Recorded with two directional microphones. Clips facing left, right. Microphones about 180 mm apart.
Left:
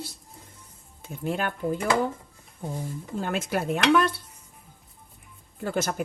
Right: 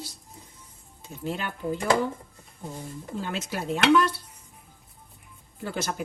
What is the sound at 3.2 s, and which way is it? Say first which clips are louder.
Dishes: left 5 dB; 50° left (ahead or behind).